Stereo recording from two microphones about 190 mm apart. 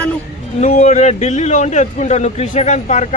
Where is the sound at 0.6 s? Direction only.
40° left (ahead or behind).